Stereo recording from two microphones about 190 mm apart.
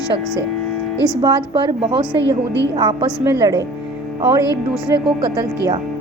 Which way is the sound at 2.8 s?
25° right (ahead or behind).